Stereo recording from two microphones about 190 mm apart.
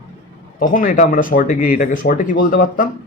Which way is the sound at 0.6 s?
45° left (ahead or behind).